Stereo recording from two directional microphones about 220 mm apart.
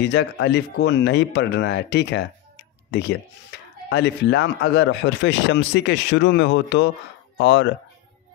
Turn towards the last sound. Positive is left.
turn(degrees=55)  # may be behind; listen again after turning